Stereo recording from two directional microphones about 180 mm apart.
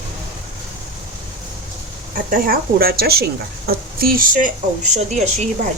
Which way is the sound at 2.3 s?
55° right (ahead or behind).